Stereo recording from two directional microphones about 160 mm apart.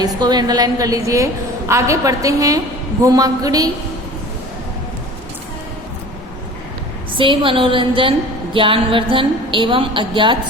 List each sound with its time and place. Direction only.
0.0 s a woman's voice: 25° right (ahead or behind)
7.2 s a woman's voice: 30° right (ahead or behind)